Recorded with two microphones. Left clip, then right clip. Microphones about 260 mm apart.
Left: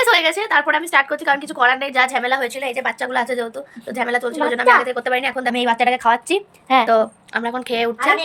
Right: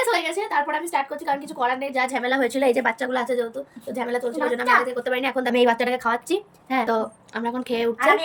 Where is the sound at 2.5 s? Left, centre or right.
Right.